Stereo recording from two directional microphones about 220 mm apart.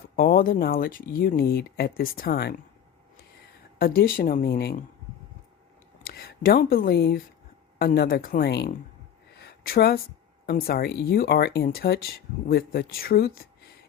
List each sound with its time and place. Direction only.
0.2 s speech: 40° left (ahead or behind)
3.8 s speech: 40° left (ahead or behind)
6.1 s speech: 45° left (ahead or behind)
9.4 s a sound: 45° left (ahead or behind)
10.4 s speech: 45° left (ahead or behind)